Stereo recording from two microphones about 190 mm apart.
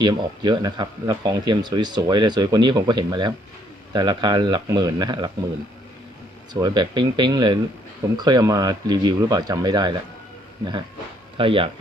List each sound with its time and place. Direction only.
0.0 s speech: 20° right (ahead or behind)
6.5 s speech: 20° right (ahead or behind)
11.3 s speech: 30° right (ahead or behind)